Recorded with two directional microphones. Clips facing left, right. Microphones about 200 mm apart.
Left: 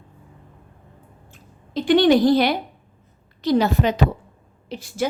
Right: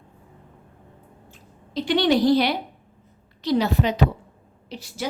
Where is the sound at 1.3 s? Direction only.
50° left (ahead or behind).